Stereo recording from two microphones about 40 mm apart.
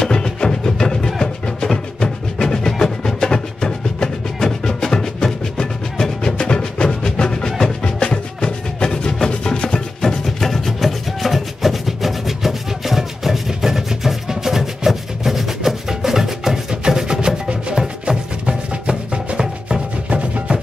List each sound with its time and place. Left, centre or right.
0.0 s music: centre
10.0 s music: centre
20.1 s music: right